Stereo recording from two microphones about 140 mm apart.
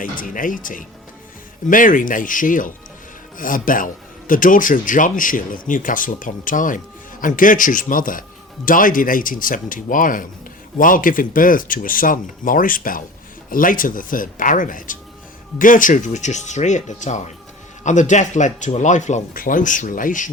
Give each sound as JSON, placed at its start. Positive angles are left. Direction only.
{"t": 0.0, "sound": "speech", "side_deg": 75}